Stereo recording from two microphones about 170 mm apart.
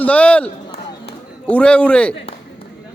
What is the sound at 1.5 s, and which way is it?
Speech, 5° left (ahead or behind).